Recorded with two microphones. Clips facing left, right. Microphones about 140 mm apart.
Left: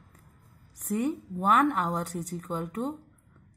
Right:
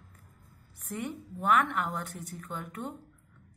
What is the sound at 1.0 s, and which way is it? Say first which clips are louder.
A woman's voice: left 6 dB; 40° left (ahead or behind).